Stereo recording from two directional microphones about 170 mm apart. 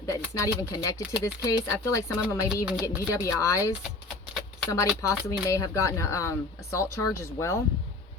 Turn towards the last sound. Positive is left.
turn(degrees=15)  # may be behind; listen again after turning